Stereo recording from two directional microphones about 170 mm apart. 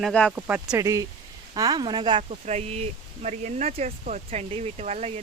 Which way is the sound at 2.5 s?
40° right (ahead or behind).